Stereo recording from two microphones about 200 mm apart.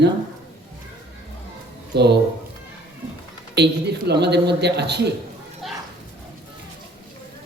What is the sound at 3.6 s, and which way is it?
A man's voice, 55° right (ahead or behind).